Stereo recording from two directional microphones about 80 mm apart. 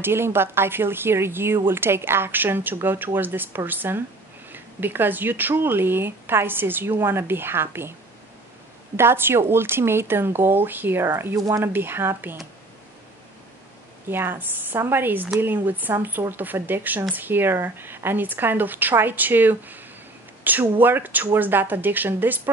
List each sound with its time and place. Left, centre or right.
0.0 s speech: right
8.9 s speech: right
11.3 s speech: right
11.6 s speech: right
14.0 s speech: right